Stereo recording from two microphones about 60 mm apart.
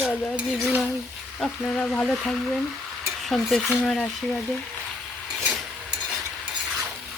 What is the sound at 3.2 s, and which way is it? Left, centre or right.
Speech, centre.